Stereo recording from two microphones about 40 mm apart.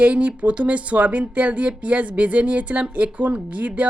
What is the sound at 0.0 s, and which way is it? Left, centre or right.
Speech, right.